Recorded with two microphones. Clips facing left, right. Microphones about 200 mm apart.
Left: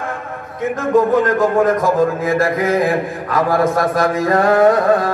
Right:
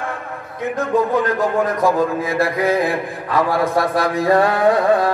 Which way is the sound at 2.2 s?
45° left (ahead or behind).